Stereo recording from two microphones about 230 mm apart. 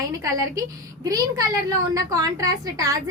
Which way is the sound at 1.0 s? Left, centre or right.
Centre.